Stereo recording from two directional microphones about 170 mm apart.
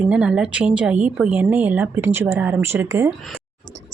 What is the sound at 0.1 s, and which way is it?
A woman's voice, 5° right (ahead or behind).